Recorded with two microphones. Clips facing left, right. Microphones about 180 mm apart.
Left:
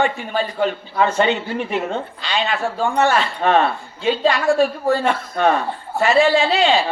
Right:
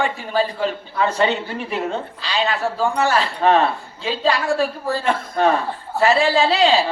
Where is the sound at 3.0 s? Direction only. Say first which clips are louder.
Left 1 dB; 35° right (ahead or behind).